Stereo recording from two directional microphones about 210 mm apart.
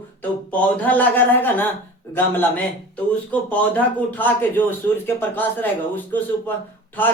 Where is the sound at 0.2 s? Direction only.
10° left (ahead or behind).